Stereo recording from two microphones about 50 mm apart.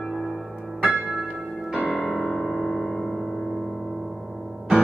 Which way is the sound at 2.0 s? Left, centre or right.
Centre.